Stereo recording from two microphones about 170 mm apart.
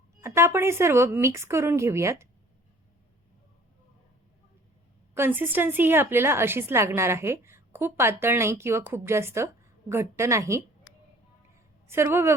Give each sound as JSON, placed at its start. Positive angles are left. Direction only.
{"t": 0.2, "sound": "a woman's voice", "side_deg": -15}
{"t": 5.1, "sound": "a woman's voice", "side_deg": -10}
{"t": 11.9, "sound": "a woman's voice", "side_deg": -15}